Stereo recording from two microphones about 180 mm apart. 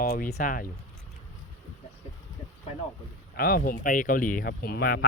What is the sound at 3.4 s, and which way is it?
Speech, 55° left (ahead or behind).